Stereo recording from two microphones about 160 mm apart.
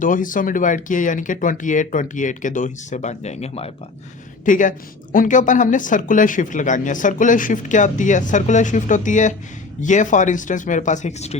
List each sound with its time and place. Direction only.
0.0 s speech: 55° left (ahead or behind); by 3.7 s 40° left (ahead or behind)
4.4 s a woman's voice: 55° left (ahead or behind)